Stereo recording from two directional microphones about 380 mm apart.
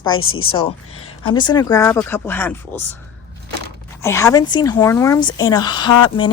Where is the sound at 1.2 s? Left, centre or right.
Centre.